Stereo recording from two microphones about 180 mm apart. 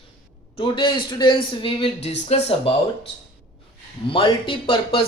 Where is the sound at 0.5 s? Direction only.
25° left (ahead or behind).